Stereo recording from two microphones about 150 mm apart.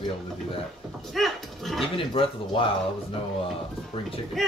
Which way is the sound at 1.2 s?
Centre (ahead or behind).